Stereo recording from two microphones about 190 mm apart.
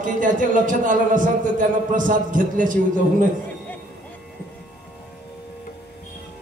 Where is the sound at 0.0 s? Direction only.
45° right (ahead or behind).